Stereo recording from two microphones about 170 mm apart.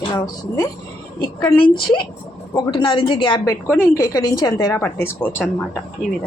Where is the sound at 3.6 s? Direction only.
15° left (ahead or behind).